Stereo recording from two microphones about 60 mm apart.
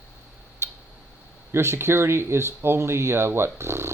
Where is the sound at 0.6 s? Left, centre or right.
Right.